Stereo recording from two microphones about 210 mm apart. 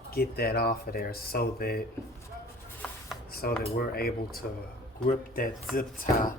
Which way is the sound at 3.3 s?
45° left (ahead or behind).